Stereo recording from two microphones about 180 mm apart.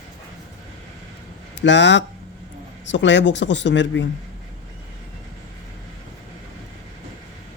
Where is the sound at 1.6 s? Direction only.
80° left.